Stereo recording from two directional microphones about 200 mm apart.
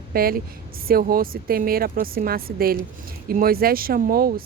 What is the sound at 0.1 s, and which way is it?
Speech, 50° right (ahead or behind).